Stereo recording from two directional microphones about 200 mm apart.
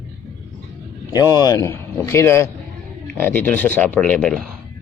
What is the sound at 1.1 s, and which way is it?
A man's voice, 20° left (ahead or behind).